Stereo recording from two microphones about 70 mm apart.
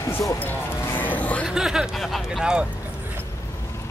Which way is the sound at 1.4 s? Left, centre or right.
Centre.